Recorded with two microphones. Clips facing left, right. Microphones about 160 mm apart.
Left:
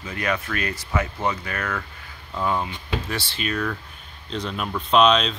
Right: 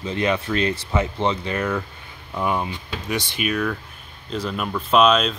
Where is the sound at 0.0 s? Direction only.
25° right (ahead or behind).